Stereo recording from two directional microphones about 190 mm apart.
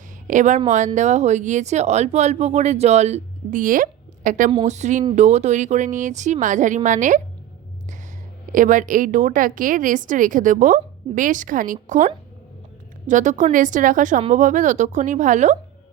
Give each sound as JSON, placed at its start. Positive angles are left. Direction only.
{"t": 0.3, "sound": "speech", "side_deg": -40}
{"t": 8.5, "sound": "a woman's voice", "side_deg": -45}